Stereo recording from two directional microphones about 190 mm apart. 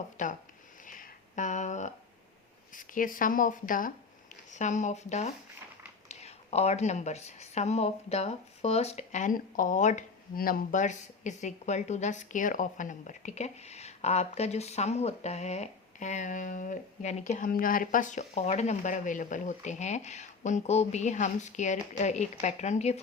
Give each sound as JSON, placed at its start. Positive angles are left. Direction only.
{"t": 0.2, "sound": "a woman's voice", "side_deg": 40}
{"t": 0.9, "sound": "a sound", "side_deg": 45}
{"t": 2.7, "sound": "a woman's voice", "side_deg": 45}